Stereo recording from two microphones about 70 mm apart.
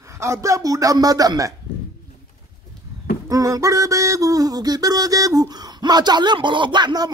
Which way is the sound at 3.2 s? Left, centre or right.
Right.